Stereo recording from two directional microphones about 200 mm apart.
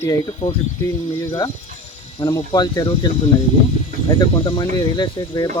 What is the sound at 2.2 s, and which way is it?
Speech, 20° left (ahead or behind).